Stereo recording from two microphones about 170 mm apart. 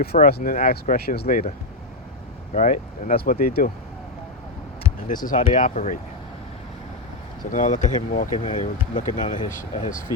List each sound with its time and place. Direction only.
0.3 s speech: 60° left (ahead or behind)
2.6 s speech: 50° left (ahead or behind)
5.0 s speech: 50° left (ahead or behind)
7.5 s speech: 45° left (ahead or behind)